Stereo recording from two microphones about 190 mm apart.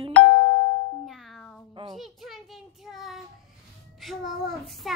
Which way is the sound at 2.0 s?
Centre (ahead or behind).